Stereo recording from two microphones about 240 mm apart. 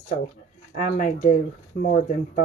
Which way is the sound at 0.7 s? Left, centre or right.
Left.